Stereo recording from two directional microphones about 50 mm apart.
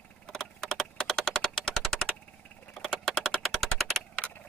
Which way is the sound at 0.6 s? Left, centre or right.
Centre.